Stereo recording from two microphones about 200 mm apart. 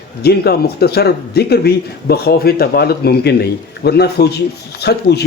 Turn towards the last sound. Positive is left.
turn(degrees=55)  # may be behind; listen again after turning